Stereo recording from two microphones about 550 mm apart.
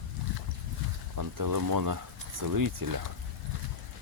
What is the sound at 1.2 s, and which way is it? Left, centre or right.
Speech, right.